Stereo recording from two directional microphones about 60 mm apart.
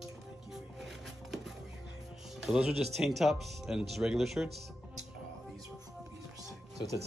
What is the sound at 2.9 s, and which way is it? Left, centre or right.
Speech, centre.